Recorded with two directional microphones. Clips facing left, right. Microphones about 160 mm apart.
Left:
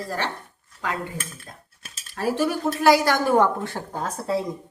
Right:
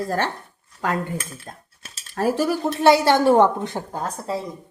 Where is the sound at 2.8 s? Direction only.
25° right (ahead or behind).